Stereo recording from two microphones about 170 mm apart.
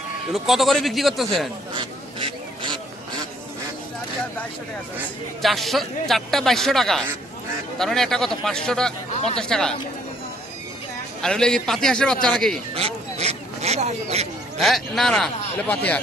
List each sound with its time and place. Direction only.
0.3 s a man's voice: centre (ahead or behind)
1.7 s duck: 30° right (ahead or behind)
5.4 s a man's voice: centre (ahead or behind)
11.2 s a man's voice: 5° left (ahead or behind)
12.7 s a sound: 35° right (ahead or behind)
14.6 s a man's voice: centre (ahead or behind)